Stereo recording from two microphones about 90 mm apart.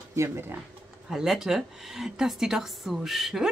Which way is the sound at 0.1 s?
30° right (ahead or behind).